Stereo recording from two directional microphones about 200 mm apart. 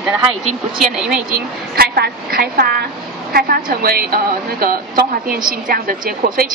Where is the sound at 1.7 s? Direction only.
50° right (ahead or behind).